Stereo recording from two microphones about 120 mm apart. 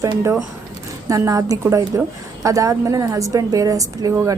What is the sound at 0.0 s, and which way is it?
A woman's voice, 25° right (ahead or behind).